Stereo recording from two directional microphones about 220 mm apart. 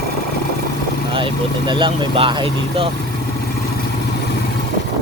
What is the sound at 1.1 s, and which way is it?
Speech, 20° right (ahead or behind).